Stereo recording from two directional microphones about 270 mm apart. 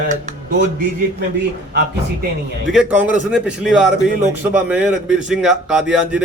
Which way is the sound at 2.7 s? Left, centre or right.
Centre.